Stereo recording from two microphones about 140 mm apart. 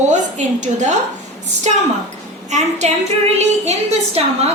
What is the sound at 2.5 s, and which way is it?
Speech, 55° right (ahead or behind).